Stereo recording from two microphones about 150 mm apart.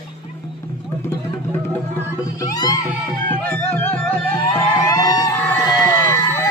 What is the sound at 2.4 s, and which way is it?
Music, 25° left (ahead or behind).